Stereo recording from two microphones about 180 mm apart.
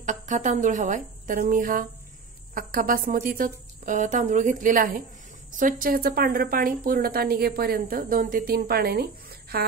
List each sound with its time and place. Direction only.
0.0 s a woman's voice: 45° right (ahead or behind)